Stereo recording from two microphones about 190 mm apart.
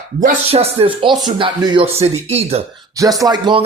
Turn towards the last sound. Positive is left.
turn(degrees=-25)  # may be behind; listen again after turning